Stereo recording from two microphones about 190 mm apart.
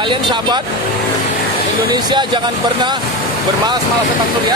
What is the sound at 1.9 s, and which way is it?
Speech, 25° right (ahead or behind).